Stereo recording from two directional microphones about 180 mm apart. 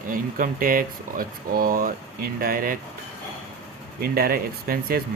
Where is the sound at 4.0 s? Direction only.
55° right (ahead or behind).